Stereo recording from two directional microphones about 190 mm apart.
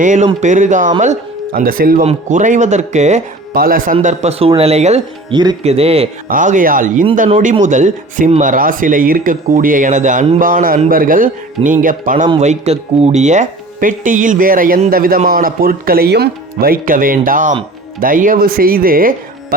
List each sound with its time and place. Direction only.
0.0 s speech: 40° right (ahead or behind)
3.9 s speech: 35° right (ahead or behind)
5.3 s speech: 20° right (ahead or behind)
6.2 s speech: 45° right (ahead or behind)